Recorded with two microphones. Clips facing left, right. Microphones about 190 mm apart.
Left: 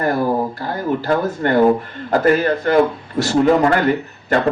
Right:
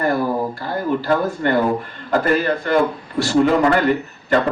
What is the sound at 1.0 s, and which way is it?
Speech, 45° left (ahead or behind).